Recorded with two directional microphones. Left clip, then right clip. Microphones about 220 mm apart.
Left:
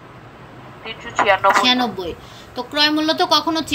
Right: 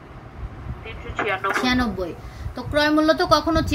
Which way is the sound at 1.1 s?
30° left (ahead or behind).